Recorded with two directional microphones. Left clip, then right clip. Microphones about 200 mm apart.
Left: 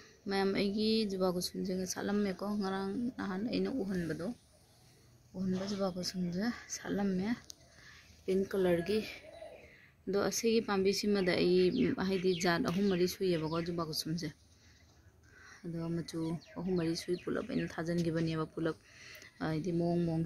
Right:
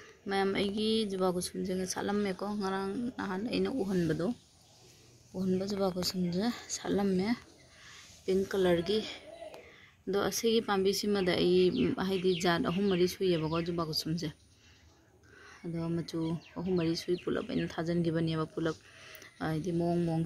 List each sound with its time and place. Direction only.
0.0 s speech: centre (ahead or behind)
3.9 s speech: 30° right (ahead or behind)
5.3 s a man's voice: 10° right (ahead or behind)
15.3 s speech: 5° right (ahead or behind)